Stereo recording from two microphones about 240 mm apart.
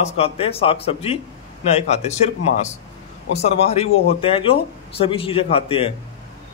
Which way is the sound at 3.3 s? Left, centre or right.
Left.